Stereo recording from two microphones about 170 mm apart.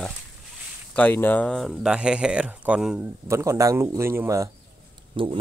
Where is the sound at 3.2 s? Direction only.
15° right (ahead or behind).